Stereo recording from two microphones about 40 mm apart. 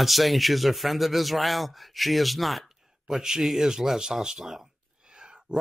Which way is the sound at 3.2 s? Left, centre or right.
Centre.